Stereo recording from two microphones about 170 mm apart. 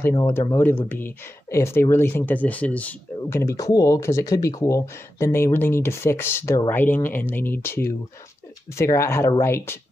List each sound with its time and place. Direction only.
0.3 s speech: 15° left (ahead or behind)